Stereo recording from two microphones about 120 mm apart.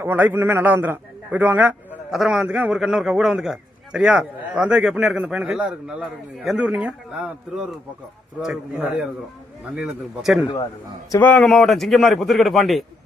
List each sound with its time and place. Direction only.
0.0 s a man's voice: 15° right (ahead or behind)
2.0 s a man's voice: 5° right (ahead or behind)
9.7 s a man's voice: 5° right (ahead or behind)
11.2 s speech: 15° left (ahead or behind)
11.4 s a man's voice: centre (ahead or behind)